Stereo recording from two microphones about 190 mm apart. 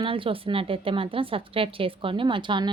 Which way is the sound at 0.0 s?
30° right (ahead or behind).